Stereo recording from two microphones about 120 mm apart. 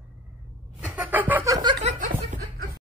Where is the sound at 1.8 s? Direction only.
90° right.